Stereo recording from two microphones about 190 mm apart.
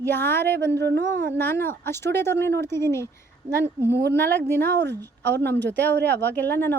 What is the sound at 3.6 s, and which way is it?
Speech, 10° right (ahead or behind).